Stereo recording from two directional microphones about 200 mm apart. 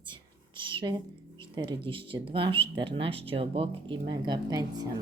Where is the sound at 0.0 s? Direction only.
25° right (ahead or behind).